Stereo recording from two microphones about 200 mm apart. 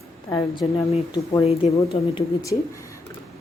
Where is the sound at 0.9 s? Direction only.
25° left (ahead or behind).